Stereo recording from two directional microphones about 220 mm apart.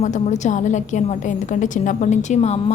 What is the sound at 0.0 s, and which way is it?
A woman's voice, 35° left (ahead or behind).